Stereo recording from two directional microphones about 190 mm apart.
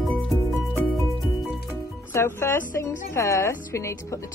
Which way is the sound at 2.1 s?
15° left (ahead or behind).